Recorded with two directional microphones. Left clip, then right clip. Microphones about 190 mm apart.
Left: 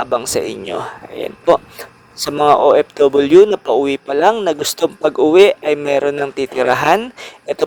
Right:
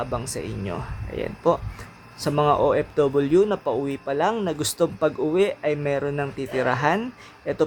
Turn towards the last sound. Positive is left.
turn(degrees=45)  # may be behind; listen again after turning